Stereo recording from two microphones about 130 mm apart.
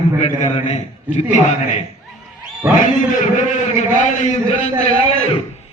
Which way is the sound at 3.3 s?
65° left (ahead or behind).